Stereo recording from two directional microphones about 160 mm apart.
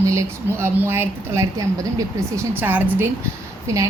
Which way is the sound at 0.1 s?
15° right (ahead or behind).